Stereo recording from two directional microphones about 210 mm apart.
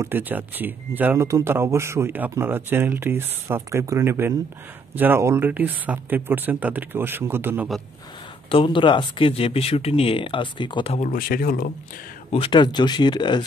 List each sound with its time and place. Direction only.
0.0 s speech: 10° right (ahead or behind)
8.5 s speech: 25° left (ahead or behind); by 11.7 s 45° left (ahead or behind)
12.3 s speech: 25° left (ahead or behind)